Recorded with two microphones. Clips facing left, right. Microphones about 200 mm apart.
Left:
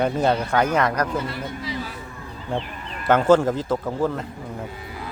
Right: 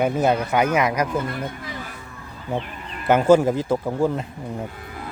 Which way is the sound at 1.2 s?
50° right (ahead or behind).